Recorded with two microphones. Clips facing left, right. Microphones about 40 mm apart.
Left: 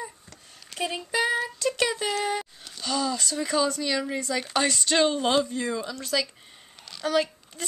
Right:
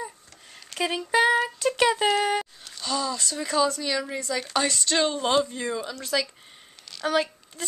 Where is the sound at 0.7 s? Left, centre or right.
Right.